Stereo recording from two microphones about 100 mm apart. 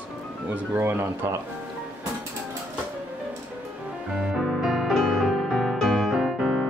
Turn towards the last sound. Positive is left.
turn(degrees=0)  # may be behind; listen again after turning